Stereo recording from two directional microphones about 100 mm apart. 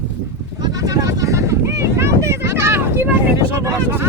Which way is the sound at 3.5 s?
30° right (ahead or behind).